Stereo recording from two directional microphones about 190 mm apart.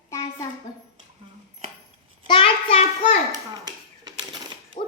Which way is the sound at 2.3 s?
25° left (ahead or behind).